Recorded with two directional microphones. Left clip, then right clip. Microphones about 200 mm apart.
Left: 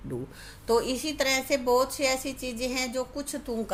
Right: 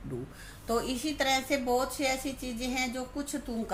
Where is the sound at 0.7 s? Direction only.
40° left (ahead or behind).